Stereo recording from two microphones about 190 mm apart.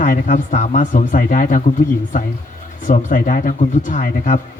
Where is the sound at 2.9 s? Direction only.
45° left (ahead or behind).